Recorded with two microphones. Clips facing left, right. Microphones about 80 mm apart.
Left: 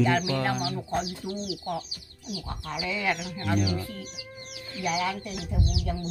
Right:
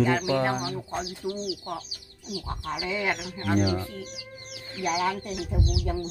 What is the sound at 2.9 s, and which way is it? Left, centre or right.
Speech, right.